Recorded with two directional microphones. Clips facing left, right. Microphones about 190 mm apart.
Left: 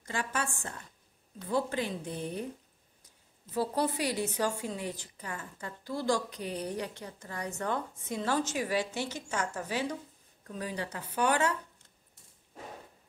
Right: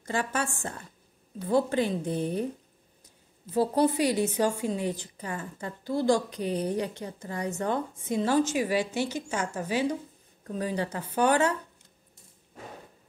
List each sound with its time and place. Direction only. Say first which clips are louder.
0.0 s speech: right 5 dB; 35° right (ahead or behind)
3.5 s a woman's voice: right 7 dB; 20° right (ahead or behind)
10.6 s speech: right 6 dB; 30° right (ahead or behind)